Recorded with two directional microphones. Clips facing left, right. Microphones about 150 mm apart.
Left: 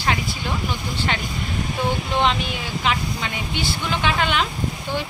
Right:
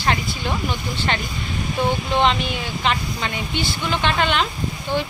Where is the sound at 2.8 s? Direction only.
5° left (ahead or behind).